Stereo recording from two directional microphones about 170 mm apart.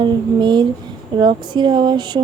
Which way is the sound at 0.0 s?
25° right (ahead or behind).